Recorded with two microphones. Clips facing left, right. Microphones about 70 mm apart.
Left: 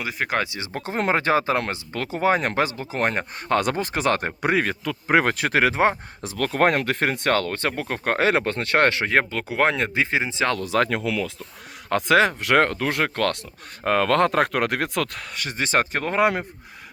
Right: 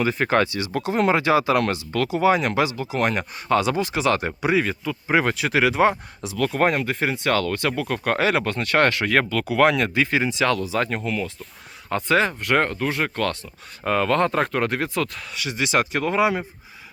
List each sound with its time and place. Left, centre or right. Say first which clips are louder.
0.0 s speech: right 5 dB; centre
0.4 s speech: right 6 dB; left
6.3 s speech: even; left
7.3 s speech: right 1 dB; left
10.6 s speech: left 2 dB; left
11.9 s speech: left 2 dB; left
13.8 s speech: left 1 dB; left
15.4 s speech: right 1 dB; left